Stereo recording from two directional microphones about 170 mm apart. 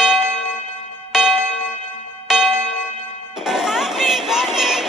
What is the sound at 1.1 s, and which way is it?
Music, centre (ahead or behind).